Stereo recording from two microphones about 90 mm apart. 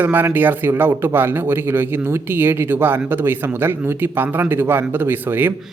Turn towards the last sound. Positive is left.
turn(degrees=-25)  # may be behind; listen again after turning